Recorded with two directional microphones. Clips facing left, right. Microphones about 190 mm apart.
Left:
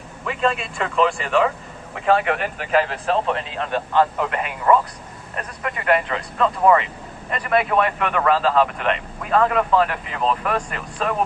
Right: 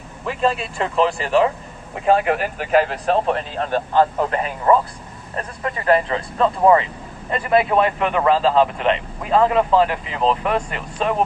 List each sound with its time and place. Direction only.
0.9 s a man's voice: 35° right (ahead or behind)